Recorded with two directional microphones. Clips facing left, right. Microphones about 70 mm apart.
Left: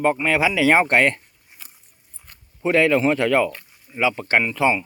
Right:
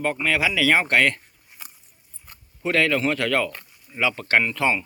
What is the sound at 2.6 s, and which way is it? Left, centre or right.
Speech, left.